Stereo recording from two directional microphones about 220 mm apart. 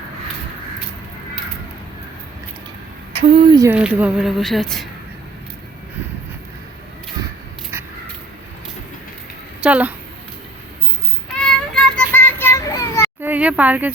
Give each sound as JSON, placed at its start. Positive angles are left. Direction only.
{"t": 3.2, "sound": "speech", "side_deg": -25}
{"t": 3.7, "sound": "a woman's voice", "side_deg": -5}
{"t": 9.6, "sound": "a woman's voice", "side_deg": -5}
{"t": 11.3, "sound": "child singing", "side_deg": 5}
{"t": 13.2, "sound": "speech", "side_deg": -5}